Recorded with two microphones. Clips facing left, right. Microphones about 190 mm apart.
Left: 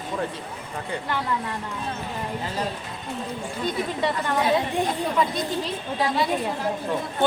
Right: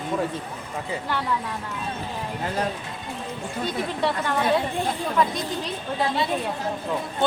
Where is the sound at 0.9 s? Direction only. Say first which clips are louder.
Even; centre (ahead or behind).